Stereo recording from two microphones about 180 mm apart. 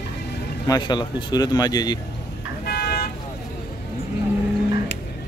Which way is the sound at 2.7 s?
60° left (ahead or behind).